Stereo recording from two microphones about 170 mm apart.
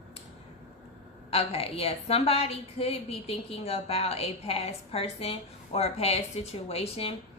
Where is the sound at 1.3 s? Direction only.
35° left (ahead or behind).